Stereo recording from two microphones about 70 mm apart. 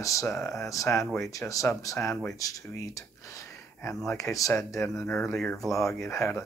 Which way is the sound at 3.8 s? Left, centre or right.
Left.